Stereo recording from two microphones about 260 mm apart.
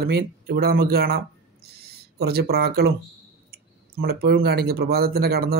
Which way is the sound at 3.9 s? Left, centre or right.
Right.